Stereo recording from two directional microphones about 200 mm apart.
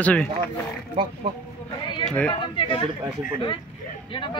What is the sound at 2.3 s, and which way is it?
Speech, 25° left (ahead or behind).